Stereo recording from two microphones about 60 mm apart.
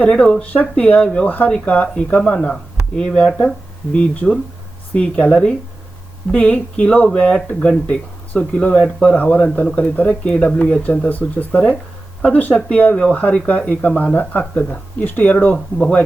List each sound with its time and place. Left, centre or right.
0.0 s speech: left
9.1 s speech: left